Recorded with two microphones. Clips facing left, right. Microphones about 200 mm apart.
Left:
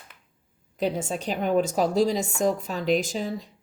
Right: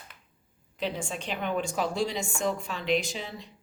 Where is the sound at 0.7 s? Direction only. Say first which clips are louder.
Left 6 dB; 45° left (ahead or behind).